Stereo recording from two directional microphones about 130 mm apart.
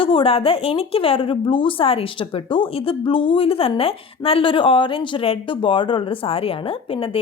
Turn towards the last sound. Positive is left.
turn(degrees=45)  # may be behind; listen again after turning